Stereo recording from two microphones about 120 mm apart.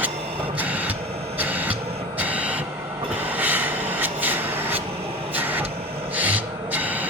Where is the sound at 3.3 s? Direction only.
15° right (ahead or behind).